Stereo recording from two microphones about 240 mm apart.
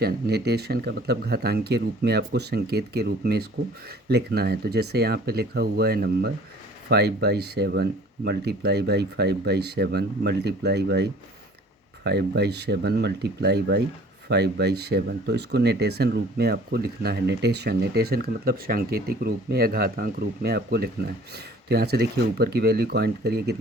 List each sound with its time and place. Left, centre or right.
0.0 s speech: right